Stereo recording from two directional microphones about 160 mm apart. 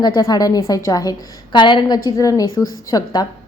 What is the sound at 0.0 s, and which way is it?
A woman's voice, 25° left (ahead or behind).